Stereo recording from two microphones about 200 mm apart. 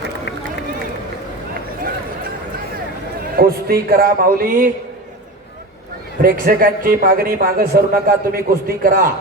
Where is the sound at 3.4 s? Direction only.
50° right (ahead or behind).